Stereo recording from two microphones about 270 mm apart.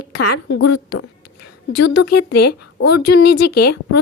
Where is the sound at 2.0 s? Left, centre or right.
Left.